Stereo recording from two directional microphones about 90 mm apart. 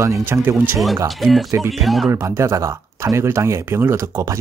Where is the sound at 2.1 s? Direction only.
30° right (ahead or behind).